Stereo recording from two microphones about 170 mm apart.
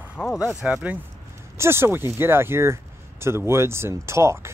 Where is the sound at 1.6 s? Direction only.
15° right (ahead or behind).